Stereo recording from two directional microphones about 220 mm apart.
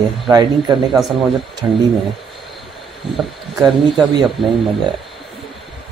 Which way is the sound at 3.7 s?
Centre (ahead or behind).